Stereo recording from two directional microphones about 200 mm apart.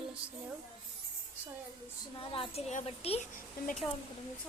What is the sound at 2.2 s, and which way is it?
A woman's voice, 25° left (ahead or behind).